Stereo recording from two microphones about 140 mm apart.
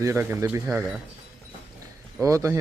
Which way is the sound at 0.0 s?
20° right (ahead or behind).